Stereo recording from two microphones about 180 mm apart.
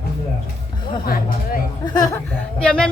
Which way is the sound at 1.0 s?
55° left (ahead or behind).